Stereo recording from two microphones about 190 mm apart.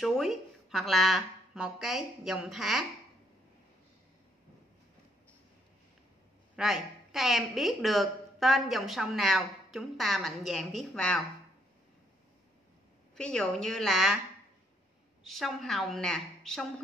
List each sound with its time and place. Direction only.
0.0 s a woman's voice: centre (ahead or behind)
6.5 s a woman's voice: centre (ahead or behind)
13.1 s a woman's voice: 5° left (ahead or behind)
15.2 s a woman's voice: centre (ahead or behind)